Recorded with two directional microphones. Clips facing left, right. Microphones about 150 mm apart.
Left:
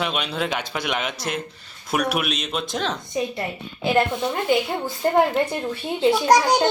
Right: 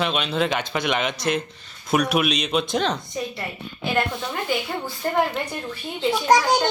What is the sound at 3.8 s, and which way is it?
A woman's voice, 20° left (ahead or behind).